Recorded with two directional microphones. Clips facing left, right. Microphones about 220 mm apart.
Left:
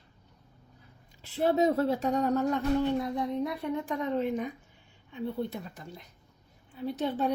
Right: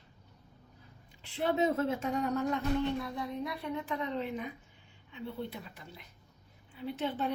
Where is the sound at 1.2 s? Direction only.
40° left (ahead or behind).